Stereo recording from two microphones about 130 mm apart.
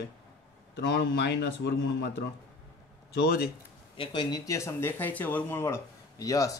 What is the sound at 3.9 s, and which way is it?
Speech, 35° left (ahead or behind).